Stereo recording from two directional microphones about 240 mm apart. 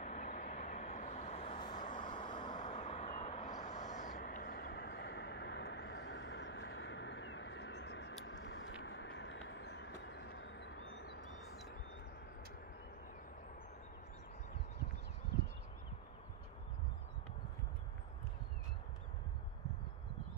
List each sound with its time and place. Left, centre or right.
0.0 s vehicle: left
2.0 s vehicle: centre
2.5 s owl: left
8.3 s vehicle: left